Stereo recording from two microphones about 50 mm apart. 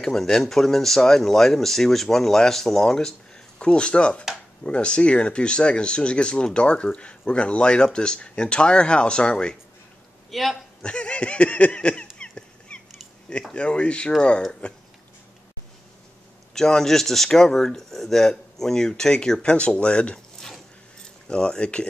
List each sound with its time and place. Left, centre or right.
0.0 s speech: centre
10.3 s a man's voice: centre
10.8 s a sound: left
13.5 s speech: left
16.5 s speech: centre
20.3 s a sound: centre
21.3 s speech: left